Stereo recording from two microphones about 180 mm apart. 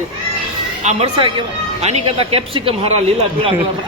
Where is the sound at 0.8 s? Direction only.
30° right (ahead or behind).